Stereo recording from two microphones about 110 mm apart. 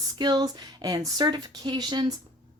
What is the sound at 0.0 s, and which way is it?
Speech, 40° right (ahead or behind).